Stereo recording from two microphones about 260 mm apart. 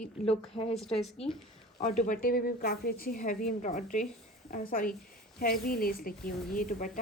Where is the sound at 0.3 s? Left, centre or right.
Left.